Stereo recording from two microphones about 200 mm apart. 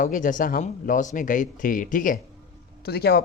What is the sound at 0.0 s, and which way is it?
Speech, 40° left (ahead or behind).